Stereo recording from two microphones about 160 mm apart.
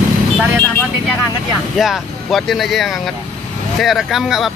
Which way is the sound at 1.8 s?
Centre (ahead or behind).